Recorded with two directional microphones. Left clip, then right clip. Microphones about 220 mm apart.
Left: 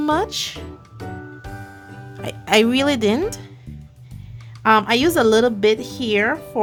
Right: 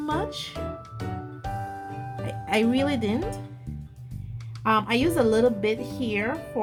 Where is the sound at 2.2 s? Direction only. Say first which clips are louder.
Left 9 dB; 40° left (ahead or behind).